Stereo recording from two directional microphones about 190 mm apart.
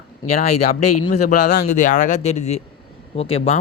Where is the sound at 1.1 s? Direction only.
40° left (ahead or behind).